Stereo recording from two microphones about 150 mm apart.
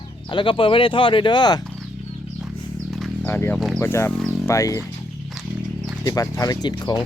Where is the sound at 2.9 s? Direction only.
Centre (ahead or behind).